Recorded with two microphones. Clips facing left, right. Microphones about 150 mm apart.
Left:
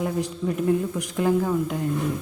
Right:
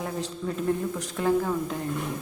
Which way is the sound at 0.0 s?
15° left (ahead or behind).